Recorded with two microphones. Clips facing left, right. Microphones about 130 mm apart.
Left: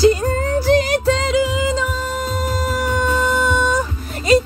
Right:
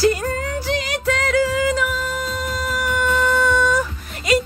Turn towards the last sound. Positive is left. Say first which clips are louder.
# left 4 dB
turn(degrees=25)  # may be behind; listen again after turning